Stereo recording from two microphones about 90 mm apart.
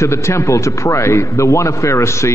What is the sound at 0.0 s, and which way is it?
A man's voice, 30° left (ahead or behind).